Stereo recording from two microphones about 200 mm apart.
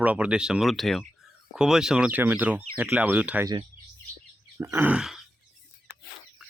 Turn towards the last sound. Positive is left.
turn(degrees=0)  # may be behind; listen again after turning